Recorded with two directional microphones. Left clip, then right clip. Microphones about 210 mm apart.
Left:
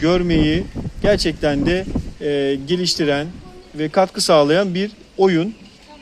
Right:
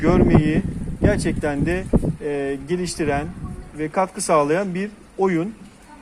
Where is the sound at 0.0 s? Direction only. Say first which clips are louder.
Left 1 dB; 45° left (ahead or behind).